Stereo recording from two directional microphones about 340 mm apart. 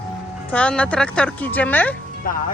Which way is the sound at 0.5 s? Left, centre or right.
Centre.